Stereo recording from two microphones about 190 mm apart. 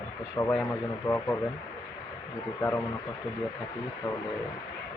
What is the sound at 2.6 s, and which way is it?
Speech, 10° left (ahead or behind).